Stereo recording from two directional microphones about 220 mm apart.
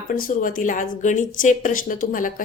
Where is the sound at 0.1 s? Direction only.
40° left (ahead or behind).